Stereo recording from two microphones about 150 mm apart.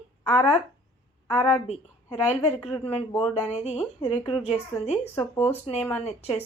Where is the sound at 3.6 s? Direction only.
45° left (ahead or behind).